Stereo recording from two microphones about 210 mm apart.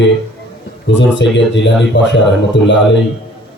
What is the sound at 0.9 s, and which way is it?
Speech, 60° left (ahead or behind).